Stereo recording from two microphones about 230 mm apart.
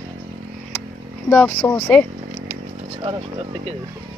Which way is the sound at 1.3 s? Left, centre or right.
Centre.